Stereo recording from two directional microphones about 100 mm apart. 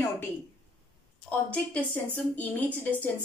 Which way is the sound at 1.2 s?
15° left (ahead or behind).